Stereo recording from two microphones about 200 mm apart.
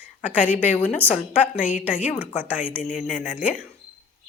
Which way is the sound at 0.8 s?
10° left (ahead or behind).